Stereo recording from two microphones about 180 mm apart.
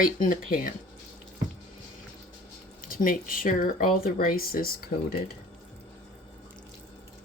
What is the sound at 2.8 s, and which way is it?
Speech, 50° left (ahead or behind).